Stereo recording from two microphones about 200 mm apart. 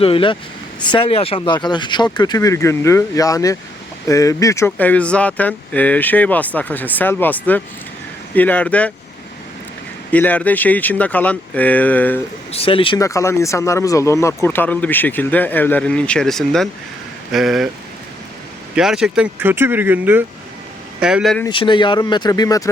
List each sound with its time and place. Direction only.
0.0 s speech: 25° left (ahead or behind); by 8.9 s 5° left (ahead or behind)
10.1 s speech: 5° left (ahead or behind)
12.5 s speech: 30° left (ahead or behind); by 17.7 s centre (ahead or behind)
18.8 s speech: 5° right (ahead or behind)
21.5 s speech: 25° left (ahead or behind)